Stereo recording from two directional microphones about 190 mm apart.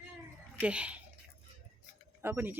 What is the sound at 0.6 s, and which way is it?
Speech, 5° right (ahead or behind).